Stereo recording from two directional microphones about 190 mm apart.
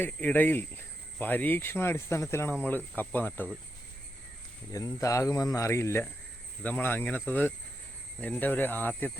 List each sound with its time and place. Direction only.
0.0 s speech: 10° left (ahead or behind)
4.7 s speech: 15° left (ahead or behind)